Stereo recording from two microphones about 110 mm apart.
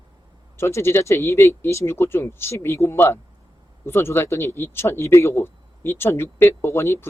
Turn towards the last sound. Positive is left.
turn(degrees=25)  # may be behind; listen again after turning